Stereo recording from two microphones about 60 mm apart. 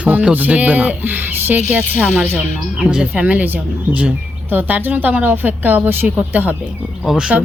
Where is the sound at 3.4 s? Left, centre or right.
Right.